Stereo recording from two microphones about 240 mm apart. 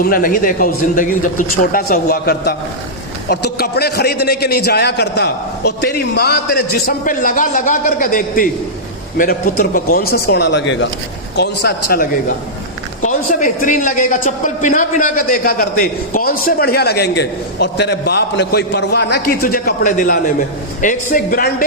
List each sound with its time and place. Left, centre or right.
0.0 s a man's voice: left
13.1 s a man's voice: left